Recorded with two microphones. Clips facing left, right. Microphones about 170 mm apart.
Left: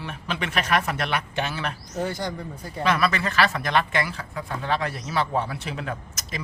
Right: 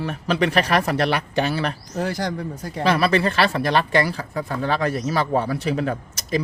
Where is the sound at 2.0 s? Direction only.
90° right.